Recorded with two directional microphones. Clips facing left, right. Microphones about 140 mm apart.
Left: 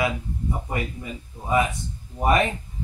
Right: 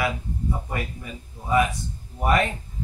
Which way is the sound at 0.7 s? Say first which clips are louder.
Left 2 dB; 20° left (ahead or behind).